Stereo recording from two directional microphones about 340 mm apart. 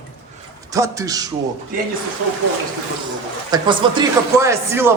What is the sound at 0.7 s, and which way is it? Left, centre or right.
Speech, centre.